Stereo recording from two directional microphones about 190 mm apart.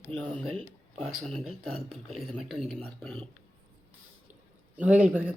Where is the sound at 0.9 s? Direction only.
35° right (ahead or behind).